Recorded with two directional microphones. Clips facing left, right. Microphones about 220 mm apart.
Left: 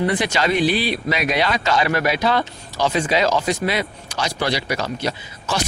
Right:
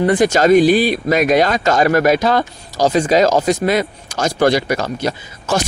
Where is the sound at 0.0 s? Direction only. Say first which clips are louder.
Right 7 dB; 45° right (ahead or behind).